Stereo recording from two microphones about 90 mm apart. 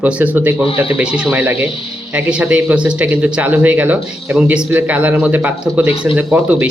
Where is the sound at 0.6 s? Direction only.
90° left.